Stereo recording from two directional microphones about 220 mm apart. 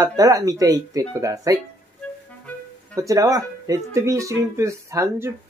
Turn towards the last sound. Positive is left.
turn(degrees=-10)  # may be behind; listen again after turning